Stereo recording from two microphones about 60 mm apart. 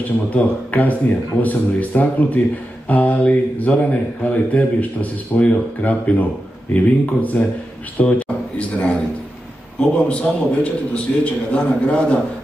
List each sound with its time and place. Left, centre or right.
0.3 s a man's voice: left
10.0 s a man's voice: left